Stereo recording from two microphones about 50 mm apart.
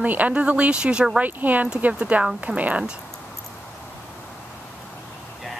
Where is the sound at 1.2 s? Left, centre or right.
Right.